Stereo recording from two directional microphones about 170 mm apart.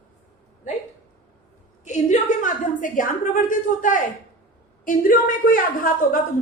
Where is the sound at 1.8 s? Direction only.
45° left (ahead or behind).